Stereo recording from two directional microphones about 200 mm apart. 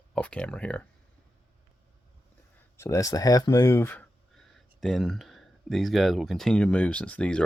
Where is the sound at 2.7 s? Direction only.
15° left (ahead or behind).